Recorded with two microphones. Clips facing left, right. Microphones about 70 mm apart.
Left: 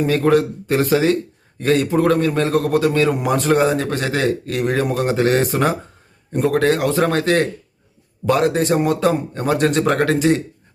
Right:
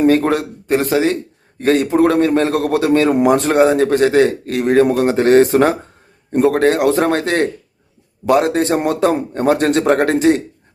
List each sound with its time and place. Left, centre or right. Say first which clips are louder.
0.0 s a man's voice: right 2 dB; right